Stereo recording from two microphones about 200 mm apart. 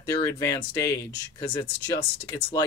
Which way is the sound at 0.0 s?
15° left (ahead or behind).